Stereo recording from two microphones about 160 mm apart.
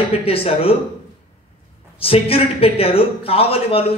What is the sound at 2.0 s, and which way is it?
Speech, 35° left (ahead or behind).